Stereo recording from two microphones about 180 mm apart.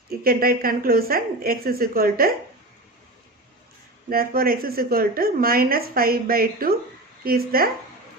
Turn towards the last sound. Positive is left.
turn(degrees=-55)  # may be behind; listen again after turning